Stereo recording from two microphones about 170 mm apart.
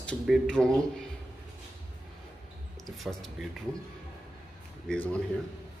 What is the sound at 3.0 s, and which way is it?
Speech, centre (ahead or behind).